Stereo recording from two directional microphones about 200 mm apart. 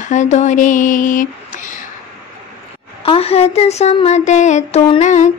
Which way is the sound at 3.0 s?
30° left (ahead or behind).